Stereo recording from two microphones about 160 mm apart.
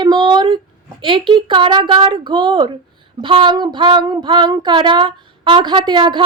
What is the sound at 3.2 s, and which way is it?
Child singing, 30° right (ahead or behind).